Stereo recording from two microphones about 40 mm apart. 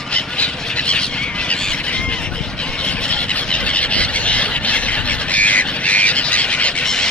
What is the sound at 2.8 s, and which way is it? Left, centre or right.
Squeal, left.